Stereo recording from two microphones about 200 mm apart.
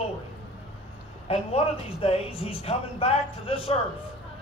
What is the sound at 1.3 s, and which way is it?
A man's voice, 30° left (ahead or behind).